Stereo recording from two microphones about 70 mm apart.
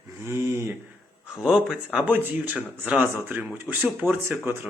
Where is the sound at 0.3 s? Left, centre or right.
Right.